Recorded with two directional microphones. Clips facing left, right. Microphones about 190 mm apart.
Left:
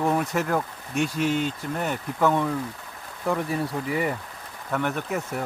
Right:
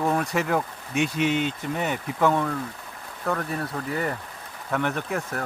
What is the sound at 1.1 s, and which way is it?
Speech, 40° left (ahead or behind).